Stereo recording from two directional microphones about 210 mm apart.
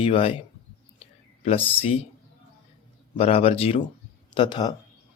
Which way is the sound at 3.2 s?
30° left (ahead or behind).